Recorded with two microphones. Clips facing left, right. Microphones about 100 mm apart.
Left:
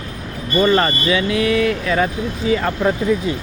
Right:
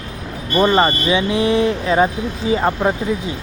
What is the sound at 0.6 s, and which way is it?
Speech, 20° right (ahead or behind).